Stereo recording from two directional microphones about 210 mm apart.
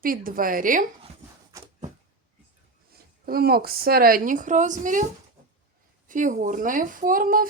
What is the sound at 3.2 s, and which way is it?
A woman's voice, 45° right (ahead or behind).